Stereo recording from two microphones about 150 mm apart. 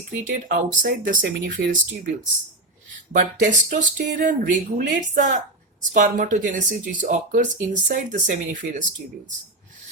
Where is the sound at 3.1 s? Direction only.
60° right (ahead or behind).